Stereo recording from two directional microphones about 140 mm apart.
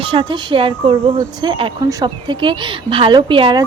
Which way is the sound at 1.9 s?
25° right (ahead or behind).